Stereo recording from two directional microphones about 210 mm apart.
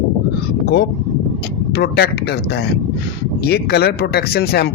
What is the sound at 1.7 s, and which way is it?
Speech, 50° left (ahead or behind).